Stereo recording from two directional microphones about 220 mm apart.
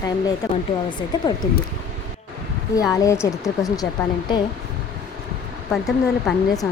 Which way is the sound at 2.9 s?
15° left (ahead or behind).